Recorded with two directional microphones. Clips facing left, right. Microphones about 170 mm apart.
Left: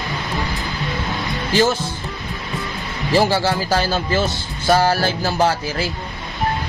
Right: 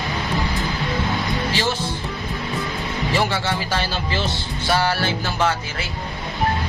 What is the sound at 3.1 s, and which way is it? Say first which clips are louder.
Speech: left 6 dB; 35° left (ahead or behind).